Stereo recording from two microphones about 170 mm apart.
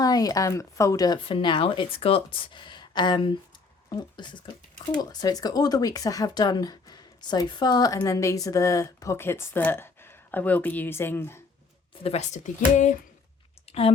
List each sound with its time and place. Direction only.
0.0 s speech: 20° left (ahead or behind)
12.0 s speech: 40° left (ahead or behind)
13.7 s a sound: 35° left (ahead or behind)